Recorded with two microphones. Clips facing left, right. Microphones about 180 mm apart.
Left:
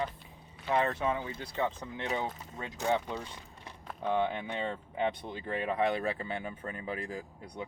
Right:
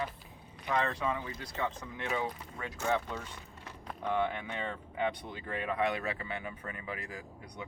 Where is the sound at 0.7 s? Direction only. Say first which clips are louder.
Left 3 dB; 30° left (ahead or behind).